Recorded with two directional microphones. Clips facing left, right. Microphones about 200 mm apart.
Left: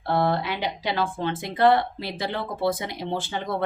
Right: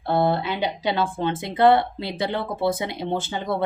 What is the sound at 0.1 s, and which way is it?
Speech, 25° right (ahead or behind).